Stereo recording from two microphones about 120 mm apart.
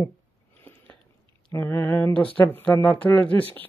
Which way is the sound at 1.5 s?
20° left (ahead or behind).